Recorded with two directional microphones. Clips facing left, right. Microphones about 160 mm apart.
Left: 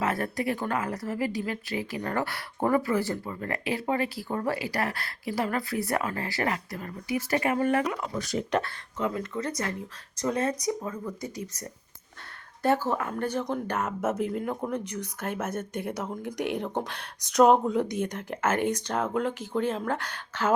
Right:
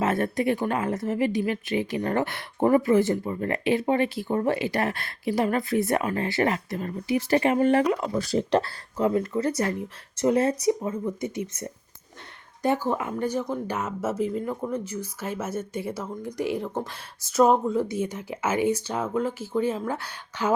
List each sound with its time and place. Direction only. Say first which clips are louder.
0.0 s speech: right 4 dB; 25° right (ahead or behind)